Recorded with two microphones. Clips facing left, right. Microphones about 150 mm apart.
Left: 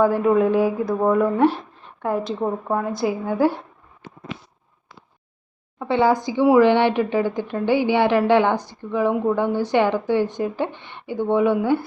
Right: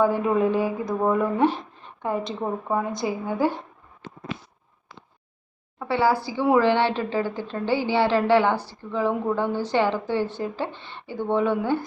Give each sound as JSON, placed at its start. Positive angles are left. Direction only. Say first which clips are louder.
{"t": 0.0, "sound": "a woman's voice", "louder": "left 4 dB", "side_deg": 5}
{"t": 5.8, "sound": "a woman's voice", "louder": "left 4 dB", "side_deg": 20}